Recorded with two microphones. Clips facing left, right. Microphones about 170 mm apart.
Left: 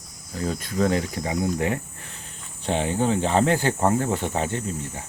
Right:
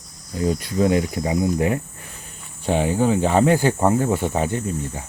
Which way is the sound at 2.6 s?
10° right (ahead or behind).